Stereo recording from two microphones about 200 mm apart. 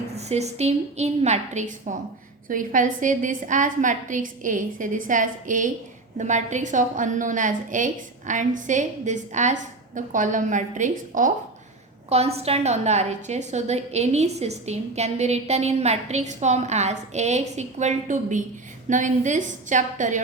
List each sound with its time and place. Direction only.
0.2 s a woman's voice: 35° right (ahead or behind)